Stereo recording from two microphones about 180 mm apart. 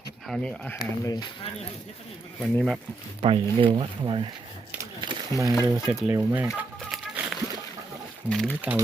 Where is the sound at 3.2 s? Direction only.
30° right (ahead or behind).